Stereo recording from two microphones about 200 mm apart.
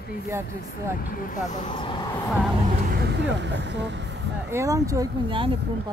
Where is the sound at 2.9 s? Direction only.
55° right (ahead or behind).